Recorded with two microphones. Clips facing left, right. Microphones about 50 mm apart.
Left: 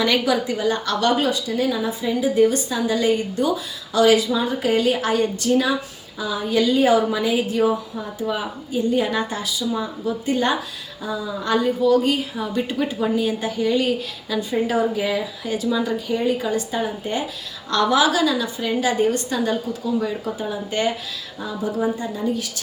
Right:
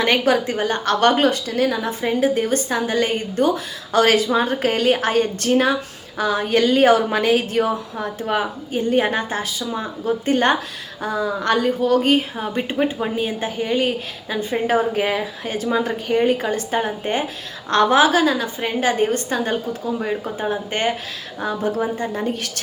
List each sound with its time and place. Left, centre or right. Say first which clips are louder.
0.0 s a woman's voice: right 2 dB; right